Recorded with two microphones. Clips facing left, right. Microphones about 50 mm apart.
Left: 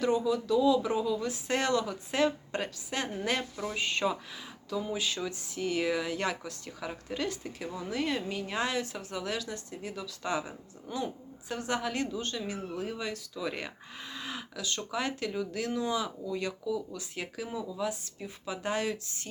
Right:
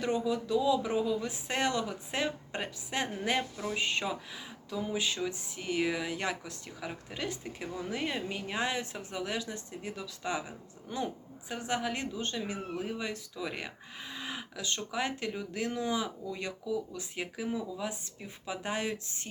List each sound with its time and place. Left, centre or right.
0.0 s speech: right; by 4.2 s centre
4.9 s a woman's voice: right
11.4 s a woman's voice: centre